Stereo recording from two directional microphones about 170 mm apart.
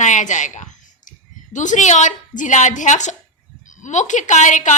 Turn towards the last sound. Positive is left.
turn(degrees=45)  # may be behind; listen again after turning